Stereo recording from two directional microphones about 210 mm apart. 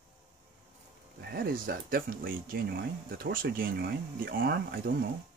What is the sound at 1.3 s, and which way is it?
Speech, 45° right (ahead or behind).